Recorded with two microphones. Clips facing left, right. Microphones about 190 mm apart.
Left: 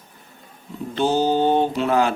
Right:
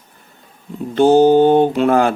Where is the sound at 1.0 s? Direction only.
55° right (ahead or behind).